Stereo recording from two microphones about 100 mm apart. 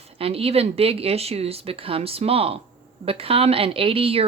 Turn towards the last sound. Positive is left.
turn(degrees=-75)  # may be behind; listen again after turning